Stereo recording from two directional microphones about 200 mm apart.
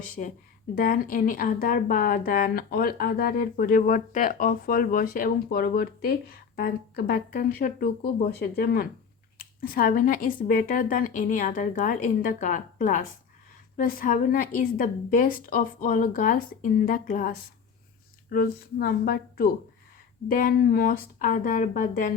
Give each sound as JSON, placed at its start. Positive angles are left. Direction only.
{"t": 0.2, "sound": "speech", "side_deg": 40}